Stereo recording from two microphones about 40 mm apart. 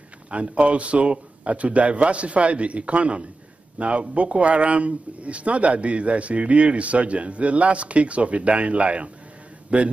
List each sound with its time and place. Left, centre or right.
0.3 s a man's voice: right